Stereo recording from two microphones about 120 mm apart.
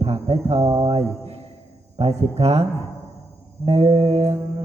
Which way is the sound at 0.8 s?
50° right (ahead or behind).